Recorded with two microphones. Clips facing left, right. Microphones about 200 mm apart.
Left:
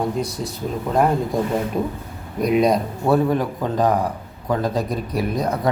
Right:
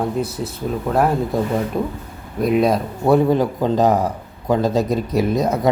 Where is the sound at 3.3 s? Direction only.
30° right (ahead or behind).